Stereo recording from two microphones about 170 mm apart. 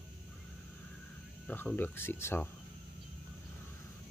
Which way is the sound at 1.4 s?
10° left (ahead or behind).